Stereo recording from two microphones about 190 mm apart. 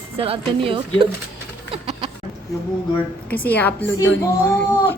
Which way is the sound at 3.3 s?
10° left (ahead or behind).